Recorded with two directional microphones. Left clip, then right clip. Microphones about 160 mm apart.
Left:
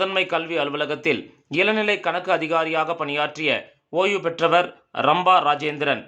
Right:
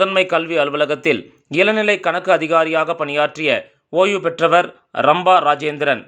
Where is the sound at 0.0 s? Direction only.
25° right (ahead or behind).